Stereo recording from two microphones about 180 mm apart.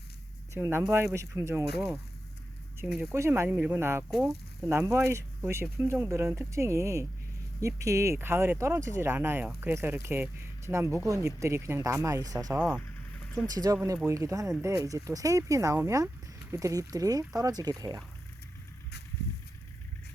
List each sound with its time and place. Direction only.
0.5 s speech: 15° right (ahead or behind)
2.7 s speech: 5° right (ahead or behind)
12.5 s speech: centre (ahead or behind)
13.5 s speech: 20° right (ahead or behind)